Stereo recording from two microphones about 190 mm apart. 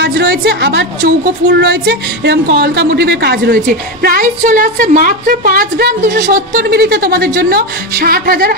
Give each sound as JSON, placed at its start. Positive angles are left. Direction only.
{"t": 0.0, "sound": "a woman's voice", "side_deg": -60}